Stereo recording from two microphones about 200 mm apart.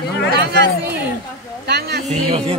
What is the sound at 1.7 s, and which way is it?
Speech, 55° right (ahead or behind).